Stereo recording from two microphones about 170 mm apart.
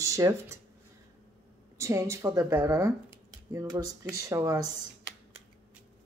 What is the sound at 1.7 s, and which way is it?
Speech, 15° right (ahead or behind).